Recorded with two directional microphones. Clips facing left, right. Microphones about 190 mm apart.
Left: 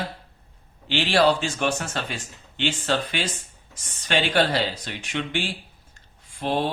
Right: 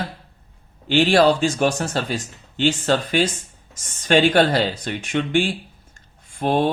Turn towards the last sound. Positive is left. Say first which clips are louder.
# right 5 dB
turn(degrees=-50)  # may be behind; listen again after turning